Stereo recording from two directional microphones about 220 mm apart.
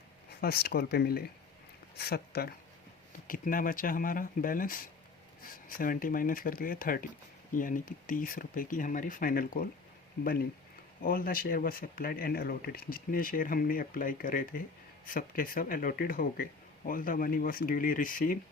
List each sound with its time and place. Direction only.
0.4 s speech: 45° left (ahead or behind)